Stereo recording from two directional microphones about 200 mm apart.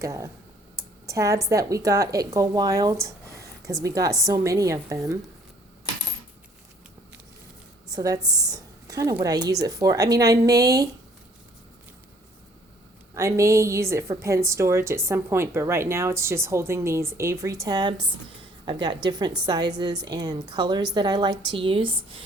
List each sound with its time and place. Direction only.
0.0 s a woman's voice: 15° right (ahead or behind)
7.9 s a woman's voice: 20° right (ahead or behind)
13.1 s a woman's voice: 15° right (ahead or behind)